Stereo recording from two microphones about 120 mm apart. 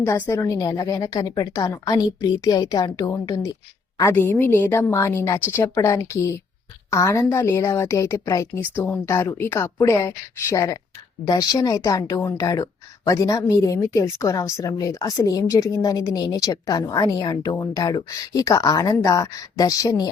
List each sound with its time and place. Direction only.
0.0 s a woman's voice: 25° left (ahead or behind)